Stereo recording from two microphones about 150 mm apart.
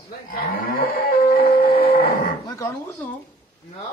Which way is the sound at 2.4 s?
20° left (ahead or behind).